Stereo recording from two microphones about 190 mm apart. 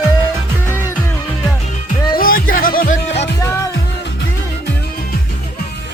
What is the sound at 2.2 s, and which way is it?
Music, 50° left (ahead or behind).